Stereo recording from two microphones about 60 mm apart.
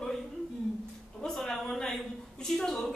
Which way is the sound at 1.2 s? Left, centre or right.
Centre.